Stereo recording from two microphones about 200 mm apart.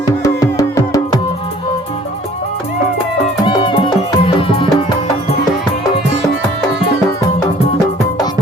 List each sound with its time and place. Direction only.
0.2 s music: 20° left (ahead or behind)
3.4 s music: 25° left (ahead or behind)